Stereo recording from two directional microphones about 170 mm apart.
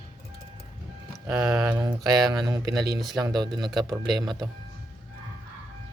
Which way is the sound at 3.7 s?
Centre (ahead or behind).